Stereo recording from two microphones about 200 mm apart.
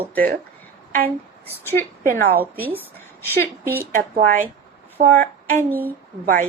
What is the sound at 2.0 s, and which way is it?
Speech, 45° right (ahead or behind).